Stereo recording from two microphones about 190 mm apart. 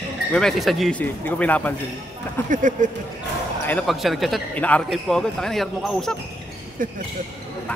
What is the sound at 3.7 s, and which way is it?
A man's voice, 5° left (ahead or behind).